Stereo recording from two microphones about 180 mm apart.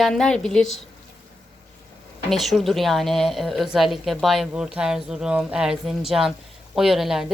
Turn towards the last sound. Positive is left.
turn(degrees=0)  # may be behind; listen again after turning